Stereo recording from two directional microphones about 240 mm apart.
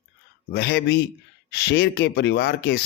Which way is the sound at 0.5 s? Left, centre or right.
Left.